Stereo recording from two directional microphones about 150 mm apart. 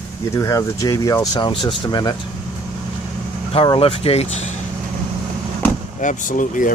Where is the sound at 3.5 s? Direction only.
35° left (ahead or behind).